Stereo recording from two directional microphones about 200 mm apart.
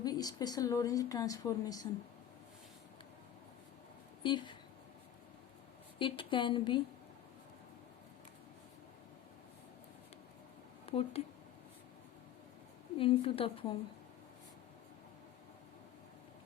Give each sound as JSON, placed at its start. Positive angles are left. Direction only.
{"t": 0.0, "sound": "speech", "side_deg": 20}
{"t": 4.2, "sound": "speech", "side_deg": 25}
{"t": 6.0, "sound": "a woman's voice", "side_deg": 25}
{"t": 10.9, "sound": "a woman's voice", "side_deg": 25}
{"t": 13.0, "sound": "a woman's voice", "side_deg": 25}